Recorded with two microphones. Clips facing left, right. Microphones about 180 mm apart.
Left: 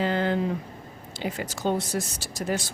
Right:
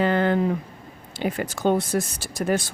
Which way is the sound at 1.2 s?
55° right (ahead or behind).